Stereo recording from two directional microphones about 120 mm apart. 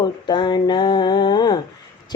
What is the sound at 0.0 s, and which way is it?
Mantra, 40° left (ahead or behind).